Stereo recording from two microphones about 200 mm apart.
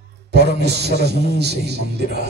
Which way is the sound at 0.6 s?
55° right (ahead or behind).